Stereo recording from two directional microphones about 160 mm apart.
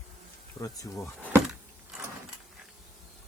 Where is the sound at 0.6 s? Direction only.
20° left (ahead or behind).